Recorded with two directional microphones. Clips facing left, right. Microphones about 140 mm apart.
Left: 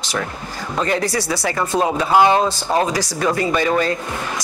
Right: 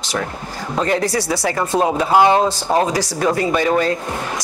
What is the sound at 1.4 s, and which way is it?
Speech, 30° right (ahead or behind).